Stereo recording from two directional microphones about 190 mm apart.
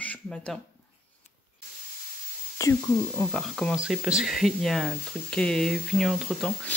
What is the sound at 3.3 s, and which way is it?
Speech, centre (ahead or behind).